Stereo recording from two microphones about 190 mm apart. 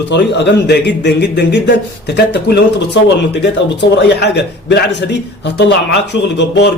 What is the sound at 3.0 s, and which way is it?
A man's voice, 70° left (ahead or behind).